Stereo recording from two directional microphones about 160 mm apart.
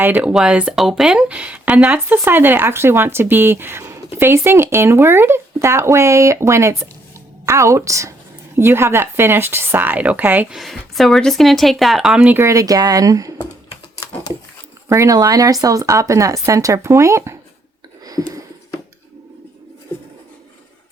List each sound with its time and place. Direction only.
0.0 s speech: 10° right (ahead or behind)
10.6 s a woman's voice: centre (ahead or behind); by 13.3 s 20° right (ahead or behind)
14.8 s speech: 20° right (ahead or behind)
18.0 s a sound: 25° right (ahead or behind)